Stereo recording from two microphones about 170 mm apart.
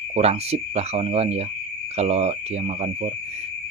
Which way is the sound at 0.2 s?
40° right (ahead or behind).